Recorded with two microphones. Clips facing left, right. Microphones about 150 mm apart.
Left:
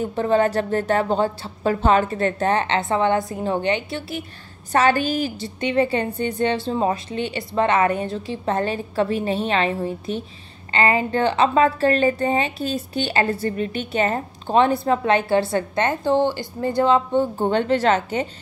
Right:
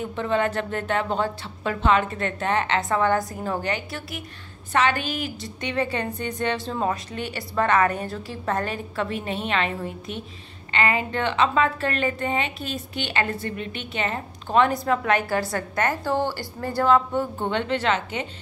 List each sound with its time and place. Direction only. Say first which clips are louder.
0.0 s a woman's voice: left 5 dB; 35° left (ahead or behind)
4.7 s a woman's voice: left 5 dB; 35° left (ahead or behind)
17.4 s a woman's voice: left 6 dB; 40° left (ahead or behind)